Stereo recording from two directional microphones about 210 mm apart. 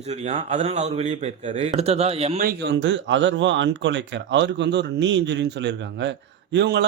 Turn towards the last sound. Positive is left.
turn(degrees=-55)  # may be behind; listen again after turning